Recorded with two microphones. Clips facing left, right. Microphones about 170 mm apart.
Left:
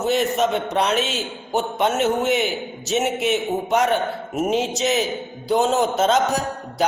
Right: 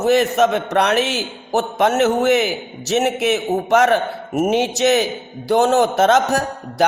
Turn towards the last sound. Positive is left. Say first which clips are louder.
# right 4 dB
turn(degrees=-70)  # may be behind; listen again after turning